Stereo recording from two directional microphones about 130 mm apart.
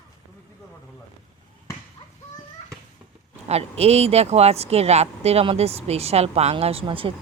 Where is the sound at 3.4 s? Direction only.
55° right (ahead or behind).